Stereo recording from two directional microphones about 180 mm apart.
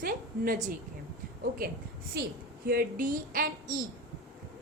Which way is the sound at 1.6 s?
55° right (ahead or behind).